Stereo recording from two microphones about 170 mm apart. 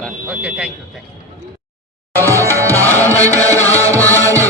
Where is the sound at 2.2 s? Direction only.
15° left (ahead or behind).